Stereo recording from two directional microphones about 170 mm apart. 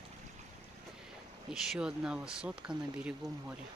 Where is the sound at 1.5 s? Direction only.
5° right (ahead or behind).